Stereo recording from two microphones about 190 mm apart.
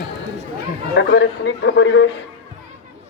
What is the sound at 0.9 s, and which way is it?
A man's voice, 75° left (ahead or behind).